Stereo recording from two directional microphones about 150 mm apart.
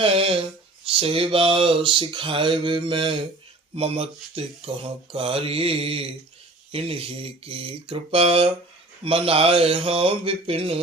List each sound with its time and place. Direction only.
0.0 s speech: 40° right (ahead or behind)